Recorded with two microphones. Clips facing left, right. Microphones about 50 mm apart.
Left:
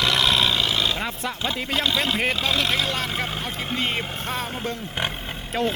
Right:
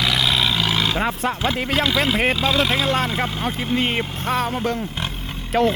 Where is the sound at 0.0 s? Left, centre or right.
Centre.